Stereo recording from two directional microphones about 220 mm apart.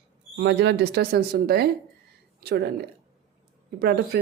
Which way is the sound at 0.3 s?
55° right (ahead or behind).